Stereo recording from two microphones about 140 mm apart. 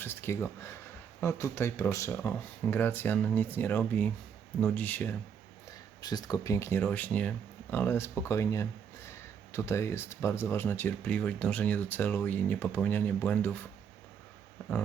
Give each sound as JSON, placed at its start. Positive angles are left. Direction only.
{"t": 0.0, "sound": "speech", "side_deg": 15}
{"t": 6.0, "sound": "speech", "side_deg": 30}